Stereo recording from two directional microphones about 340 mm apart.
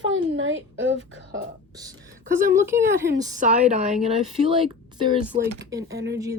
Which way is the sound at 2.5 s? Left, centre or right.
Centre.